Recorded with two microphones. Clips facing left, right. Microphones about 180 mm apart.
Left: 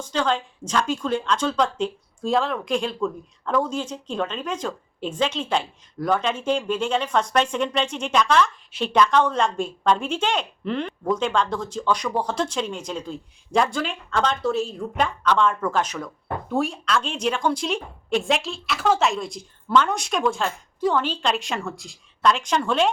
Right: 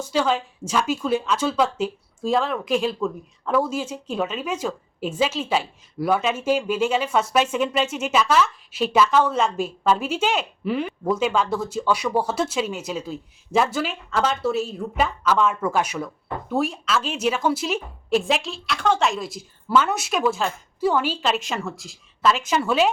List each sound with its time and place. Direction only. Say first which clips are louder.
0.0 s a woman's voice: right 2 dB; 10° right (ahead or behind)